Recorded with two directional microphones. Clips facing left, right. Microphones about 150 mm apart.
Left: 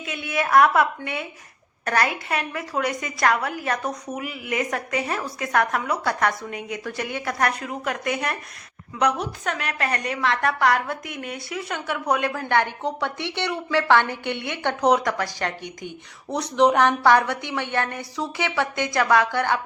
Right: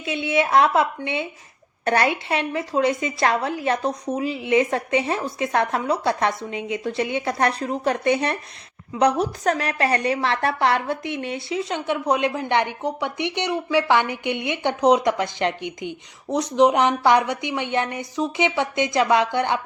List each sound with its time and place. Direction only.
0.0 s a woman's voice: 25° right (ahead or behind)